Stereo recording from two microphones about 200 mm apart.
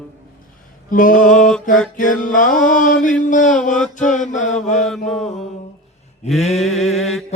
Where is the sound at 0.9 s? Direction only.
40° left (ahead or behind).